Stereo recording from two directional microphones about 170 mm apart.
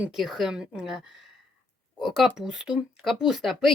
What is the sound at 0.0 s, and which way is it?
Speech, centre (ahead or behind).